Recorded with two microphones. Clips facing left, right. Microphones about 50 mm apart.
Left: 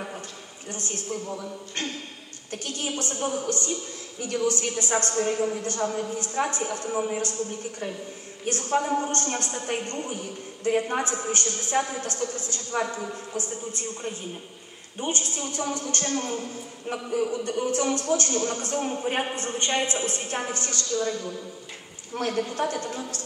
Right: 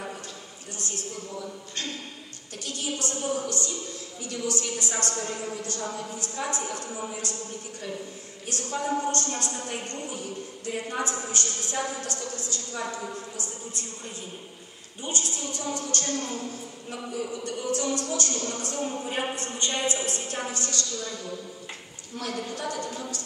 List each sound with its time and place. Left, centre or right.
0.7 s a woman's voice: left
2.5 s a woman's voice: left
8.5 s a woman's voice: left
15.0 s a woman's voice: left